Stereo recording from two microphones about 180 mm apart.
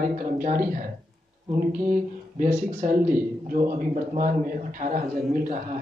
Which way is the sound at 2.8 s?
50° right (ahead or behind).